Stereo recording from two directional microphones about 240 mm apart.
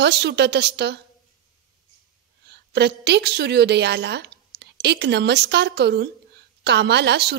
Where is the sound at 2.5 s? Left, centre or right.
Right.